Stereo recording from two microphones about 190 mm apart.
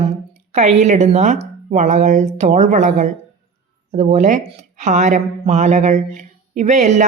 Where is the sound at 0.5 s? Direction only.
40° right (ahead or behind).